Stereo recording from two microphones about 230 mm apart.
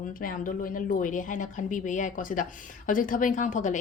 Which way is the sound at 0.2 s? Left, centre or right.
Left.